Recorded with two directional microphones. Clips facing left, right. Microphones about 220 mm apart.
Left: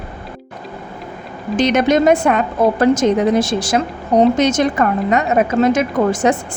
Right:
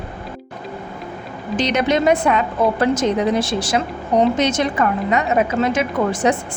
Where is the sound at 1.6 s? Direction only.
50° left (ahead or behind).